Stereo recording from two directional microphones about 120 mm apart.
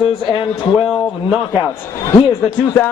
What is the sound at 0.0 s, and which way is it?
Speech, 45° left (ahead or behind).